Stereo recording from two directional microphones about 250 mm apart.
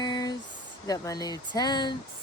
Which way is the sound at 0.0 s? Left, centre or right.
Centre.